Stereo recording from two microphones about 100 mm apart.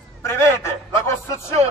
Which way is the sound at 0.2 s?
25° left (ahead or behind).